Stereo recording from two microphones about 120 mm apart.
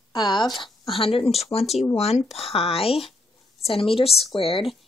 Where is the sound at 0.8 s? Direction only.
50° left (ahead or behind).